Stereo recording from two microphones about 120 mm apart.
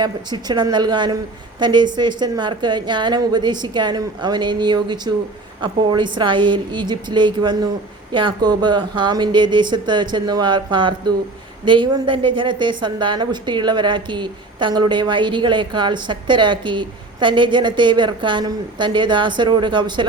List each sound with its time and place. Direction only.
0.0 s a woman's voice: 35° right (ahead or behind)